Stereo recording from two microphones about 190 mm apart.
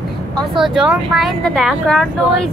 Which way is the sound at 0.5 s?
Centre (ahead or behind).